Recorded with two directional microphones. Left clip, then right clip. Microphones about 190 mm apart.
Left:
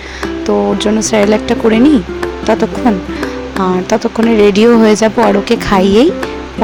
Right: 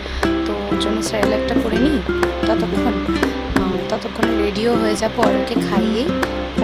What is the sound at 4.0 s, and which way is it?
A woman's voice, 45° left (ahead or behind).